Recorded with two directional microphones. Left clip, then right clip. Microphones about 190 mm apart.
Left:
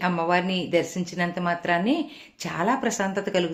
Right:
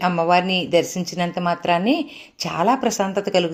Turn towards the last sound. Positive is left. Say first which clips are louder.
# right 5 dB
turn(degrees=-25)  # may be behind; listen again after turning